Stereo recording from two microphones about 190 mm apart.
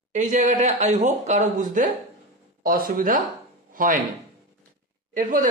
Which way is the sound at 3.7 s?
45° right (ahead or behind).